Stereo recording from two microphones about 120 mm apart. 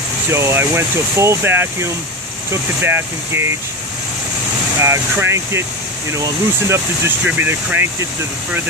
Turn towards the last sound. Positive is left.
turn(degrees=-15)  # may be behind; listen again after turning